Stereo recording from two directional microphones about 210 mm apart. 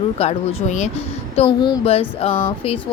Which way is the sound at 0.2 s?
30° left (ahead or behind).